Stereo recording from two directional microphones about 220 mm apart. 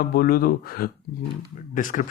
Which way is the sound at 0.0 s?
40° left (ahead or behind).